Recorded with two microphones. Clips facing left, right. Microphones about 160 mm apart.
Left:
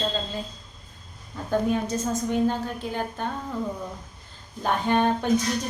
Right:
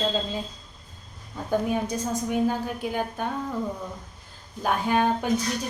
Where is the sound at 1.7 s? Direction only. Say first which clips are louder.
Left 1 dB; 15° right (ahead or behind).